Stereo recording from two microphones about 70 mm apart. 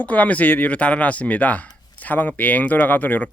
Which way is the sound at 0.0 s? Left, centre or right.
Left.